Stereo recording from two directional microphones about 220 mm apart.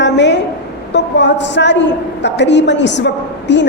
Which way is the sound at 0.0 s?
55° left (ahead or behind).